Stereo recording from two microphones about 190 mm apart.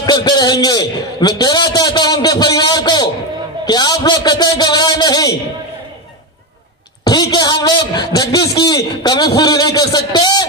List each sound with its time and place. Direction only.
0.0 s a man's voice: 20° left (ahead or behind)
7.1 s a man's voice: 20° left (ahead or behind)